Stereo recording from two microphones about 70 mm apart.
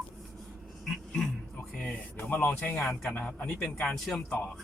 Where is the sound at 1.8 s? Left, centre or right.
Centre.